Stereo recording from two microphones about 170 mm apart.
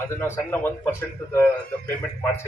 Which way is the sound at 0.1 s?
15° left (ahead or behind).